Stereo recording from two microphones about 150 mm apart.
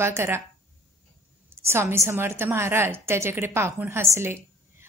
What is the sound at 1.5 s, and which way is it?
A woman's voice, 15° right (ahead or behind).